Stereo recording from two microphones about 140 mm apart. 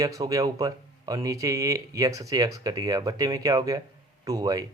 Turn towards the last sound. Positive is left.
turn(degrees=-25)  # may be behind; listen again after turning